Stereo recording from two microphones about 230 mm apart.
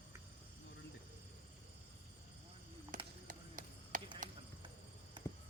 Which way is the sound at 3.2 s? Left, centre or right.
Right.